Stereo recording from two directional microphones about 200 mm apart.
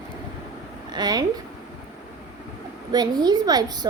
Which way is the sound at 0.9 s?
20° right (ahead or behind).